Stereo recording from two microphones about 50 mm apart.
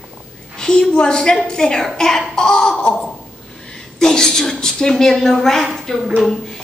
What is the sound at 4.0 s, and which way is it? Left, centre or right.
A woman's voice, centre.